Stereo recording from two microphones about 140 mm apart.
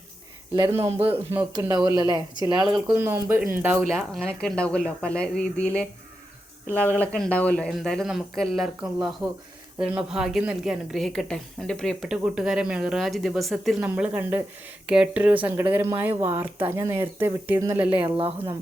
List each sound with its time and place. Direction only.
0.5 s speech: 25° right (ahead or behind)
0.8 s a man's voice: 45° right (ahead or behind)
1.6 s speech: 25° right (ahead or behind)
2.6 s a woman's voice: 5° right (ahead or behind)
3.0 s speech: 15° right (ahead or behind)
3.9 s a woman's voice: centre (ahead or behind)
13.8 s speech: 10° right (ahead or behind)
17.9 s speech: 40° right (ahead or behind)